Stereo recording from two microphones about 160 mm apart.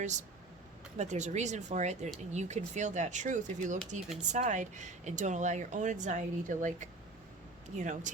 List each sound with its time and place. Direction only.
0.0 s speech: 50° right (ahead or behind)